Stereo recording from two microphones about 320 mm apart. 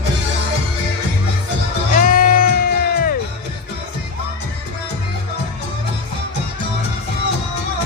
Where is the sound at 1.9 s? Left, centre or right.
Left.